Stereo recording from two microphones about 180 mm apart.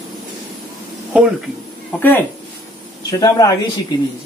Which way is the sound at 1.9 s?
10° left (ahead or behind).